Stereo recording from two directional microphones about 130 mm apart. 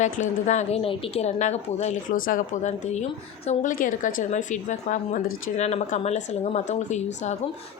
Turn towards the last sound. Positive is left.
turn(degrees=65)  # may be behind; listen again after turning